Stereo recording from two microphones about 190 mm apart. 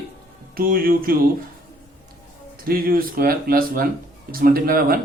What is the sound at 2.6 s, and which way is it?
Speech, 50° right (ahead or behind).